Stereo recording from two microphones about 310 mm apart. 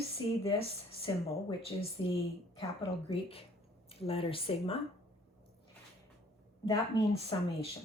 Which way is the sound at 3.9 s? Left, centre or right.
Centre.